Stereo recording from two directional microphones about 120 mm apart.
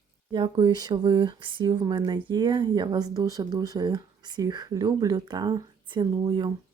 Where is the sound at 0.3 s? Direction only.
45° right (ahead or behind).